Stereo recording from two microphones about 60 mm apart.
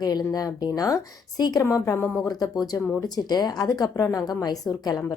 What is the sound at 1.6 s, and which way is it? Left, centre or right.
Speech, left.